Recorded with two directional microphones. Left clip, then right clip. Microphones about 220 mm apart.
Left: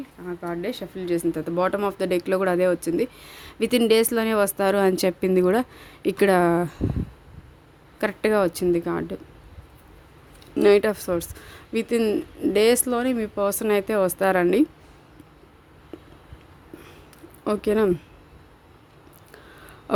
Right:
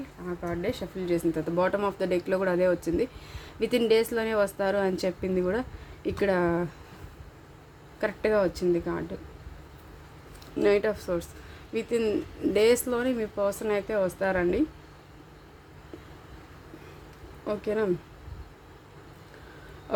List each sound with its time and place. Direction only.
0.3 s speech: 35° left (ahead or behind)
7.9 s speech: 40° left (ahead or behind)
10.5 s speech: 40° left (ahead or behind)
17.4 s speech: 50° left (ahead or behind)